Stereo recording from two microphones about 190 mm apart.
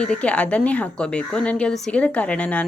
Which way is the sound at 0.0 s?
5° left (ahead or behind).